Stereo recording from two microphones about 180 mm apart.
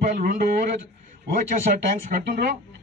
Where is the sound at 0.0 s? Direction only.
50° right (ahead or behind).